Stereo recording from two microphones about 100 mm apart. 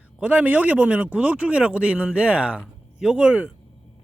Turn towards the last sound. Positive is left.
turn(degrees=-10)  # may be behind; listen again after turning